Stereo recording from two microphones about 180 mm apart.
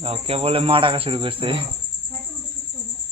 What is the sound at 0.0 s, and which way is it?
A man's voice, 30° right (ahead or behind).